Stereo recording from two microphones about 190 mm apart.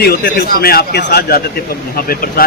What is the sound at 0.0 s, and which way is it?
A man's voice, 55° left (ahead or behind).